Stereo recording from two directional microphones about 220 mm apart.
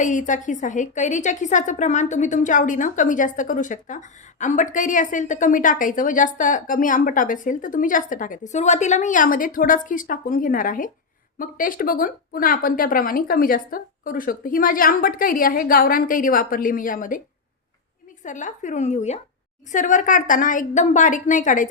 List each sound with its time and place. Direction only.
0.0 s a woman's voice: 35° left (ahead or behind)
18.2 s a woman's voice: 35° left (ahead or behind)